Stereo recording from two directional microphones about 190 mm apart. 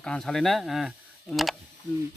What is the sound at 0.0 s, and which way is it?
Speech, 5° left (ahead or behind).